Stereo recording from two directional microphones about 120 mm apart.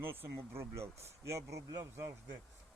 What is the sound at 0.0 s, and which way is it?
Speech, 20° right (ahead or behind).